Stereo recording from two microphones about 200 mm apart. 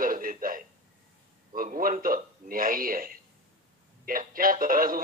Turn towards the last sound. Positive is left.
turn(degrees=-45)  # may be behind; listen again after turning